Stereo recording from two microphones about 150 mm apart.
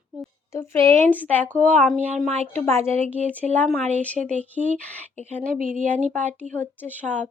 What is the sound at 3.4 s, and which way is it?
Speech, 10° left (ahead or behind).